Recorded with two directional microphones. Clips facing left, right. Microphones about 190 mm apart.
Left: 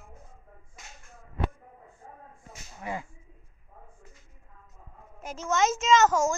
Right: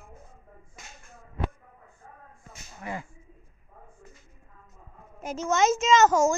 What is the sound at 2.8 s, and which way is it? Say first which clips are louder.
Speech: left 1 dB; 15° left (ahead or behind).